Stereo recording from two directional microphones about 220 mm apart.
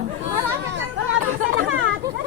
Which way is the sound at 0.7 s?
60° right (ahead or behind).